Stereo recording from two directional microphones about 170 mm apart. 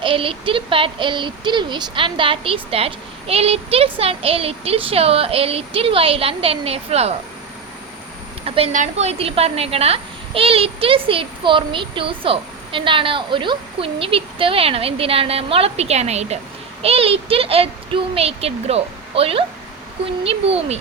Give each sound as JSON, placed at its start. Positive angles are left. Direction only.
{"t": 0.0, "sound": "a woman's voice", "side_deg": -30}
{"t": 8.4, "sound": "a woman's voice", "side_deg": -35}